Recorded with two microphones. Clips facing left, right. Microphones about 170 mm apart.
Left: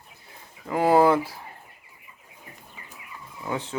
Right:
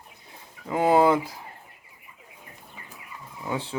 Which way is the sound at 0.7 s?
20° right (ahead or behind).